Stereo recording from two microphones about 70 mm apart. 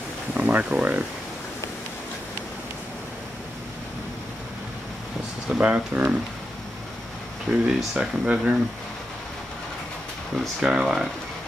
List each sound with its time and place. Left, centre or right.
0.3 s a sound: right
0.7 s speech: right
5.5 s speech: right
7.6 s speech: centre
10.6 s speech: centre